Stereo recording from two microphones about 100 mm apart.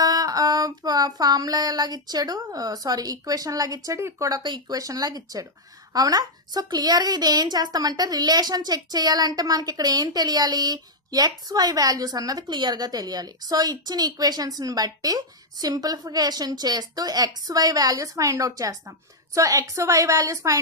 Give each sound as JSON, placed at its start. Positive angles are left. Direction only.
{"t": 0.0, "sound": "a woman's voice", "side_deg": -40}